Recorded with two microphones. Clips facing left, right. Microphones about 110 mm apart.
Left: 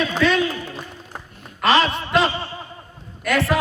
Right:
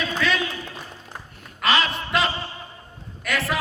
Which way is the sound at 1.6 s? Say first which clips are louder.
Left 5 dB; 35° left (ahead or behind).